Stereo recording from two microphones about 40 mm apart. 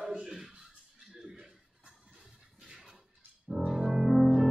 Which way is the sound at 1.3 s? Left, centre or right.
Right.